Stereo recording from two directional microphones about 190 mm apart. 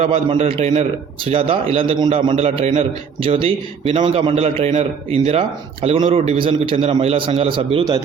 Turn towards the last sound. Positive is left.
turn(degrees=-25)  # may be behind; listen again after turning